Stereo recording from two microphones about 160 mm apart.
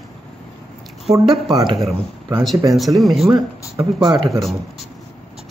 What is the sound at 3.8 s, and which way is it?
Speech, 30° right (ahead or behind).